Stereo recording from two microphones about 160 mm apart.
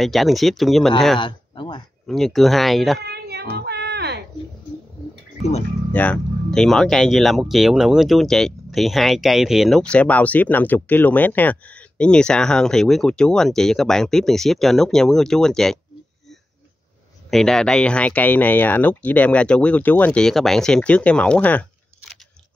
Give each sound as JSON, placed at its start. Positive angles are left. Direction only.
{"t": 0.0, "sound": "speech", "side_deg": 0}
{"t": 1.2, "sound": "a sound", "side_deg": 30}
{"t": 2.0, "sound": "speech", "side_deg": 0}
{"t": 3.1, "sound": "child singing", "side_deg": -90}
{"t": 5.9, "sound": "speech", "side_deg": 5}
{"t": 17.3, "sound": "speech", "side_deg": 5}